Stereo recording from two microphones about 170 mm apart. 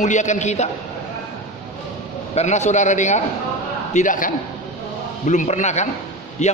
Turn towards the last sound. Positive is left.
turn(degrees=40)  # may be behind; listen again after turning